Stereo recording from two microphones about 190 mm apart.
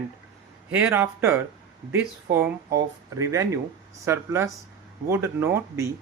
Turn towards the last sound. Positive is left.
turn(degrees=-10)  # may be behind; listen again after turning